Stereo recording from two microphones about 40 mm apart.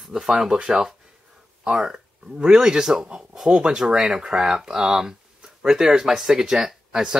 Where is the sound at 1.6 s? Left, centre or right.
Centre.